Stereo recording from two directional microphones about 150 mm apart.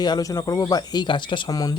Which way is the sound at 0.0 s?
25° left (ahead or behind).